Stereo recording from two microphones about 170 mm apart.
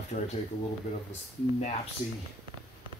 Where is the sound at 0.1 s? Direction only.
45° left (ahead or behind).